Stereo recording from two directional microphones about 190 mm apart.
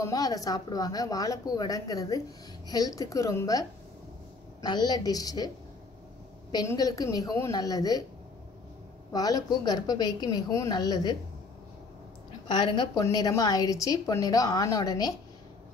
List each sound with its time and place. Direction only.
0.0 s a woman's voice: 20° left (ahead or behind)
6.5 s a woman's voice: 20° left (ahead or behind)
9.1 s a woman's voice: 20° left (ahead or behind)
12.4 s a woman's voice: 25° left (ahead or behind)